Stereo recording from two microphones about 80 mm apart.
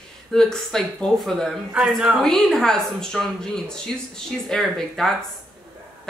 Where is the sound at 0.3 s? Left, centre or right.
Centre.